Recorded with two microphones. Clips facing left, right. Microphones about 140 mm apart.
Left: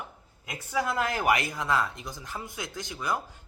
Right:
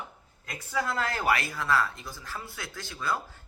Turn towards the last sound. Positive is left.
turn(degrees=15)  # may be behind; listen again after turning